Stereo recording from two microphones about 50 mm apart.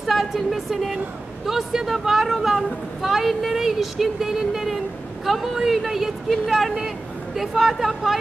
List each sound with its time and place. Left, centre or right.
0.0 s a woman's voice: centre